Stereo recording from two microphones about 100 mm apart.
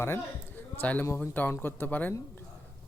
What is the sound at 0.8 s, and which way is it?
Speech, 15° left (ahead or behind).